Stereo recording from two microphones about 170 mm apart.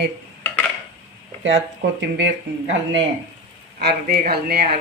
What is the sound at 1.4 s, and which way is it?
Speech, 90° right.